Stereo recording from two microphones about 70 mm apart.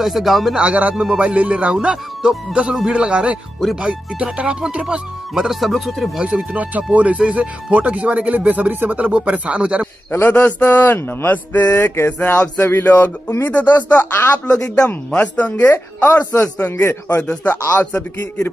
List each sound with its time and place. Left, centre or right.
0.0 s speech: centre
0.6 s speech: centre
6.1 s speech: centre
10.1 s a woman's voice: left
16.6 s a woman's voice: left